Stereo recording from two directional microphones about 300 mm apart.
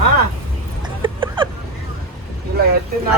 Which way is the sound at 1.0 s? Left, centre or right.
Centre.